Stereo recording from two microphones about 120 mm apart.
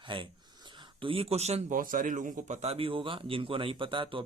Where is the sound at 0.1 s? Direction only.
45° right (ahead or behind).